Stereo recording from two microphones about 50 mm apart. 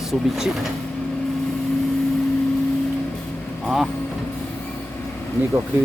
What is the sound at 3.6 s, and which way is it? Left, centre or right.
Speech, centre.